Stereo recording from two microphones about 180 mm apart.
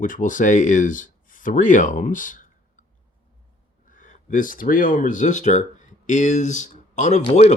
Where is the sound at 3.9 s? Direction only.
45° left (ahead or behind).